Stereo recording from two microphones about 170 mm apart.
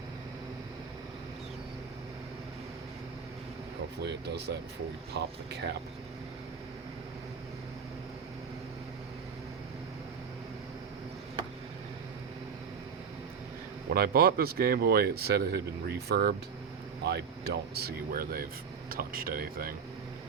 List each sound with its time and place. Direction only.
4.0 s speech: 80° right
13.9 s speech: 65° right (ahead or behind)